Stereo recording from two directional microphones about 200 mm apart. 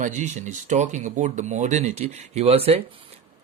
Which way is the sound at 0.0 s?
35° right (ahead or behind).